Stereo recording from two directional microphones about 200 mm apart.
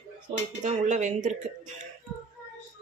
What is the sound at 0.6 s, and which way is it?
Speech, 35° right (ahead or behind).